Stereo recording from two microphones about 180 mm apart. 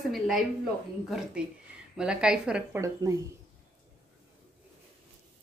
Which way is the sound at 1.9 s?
5° right (ahead or behind).